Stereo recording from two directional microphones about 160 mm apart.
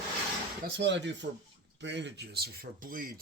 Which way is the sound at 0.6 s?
90° right.